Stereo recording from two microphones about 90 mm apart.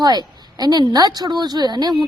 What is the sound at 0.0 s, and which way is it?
A woman's voice, 50° right (ahead or behind).